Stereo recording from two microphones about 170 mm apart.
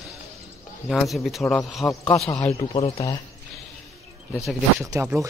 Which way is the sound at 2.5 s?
35° left (ahead or behind).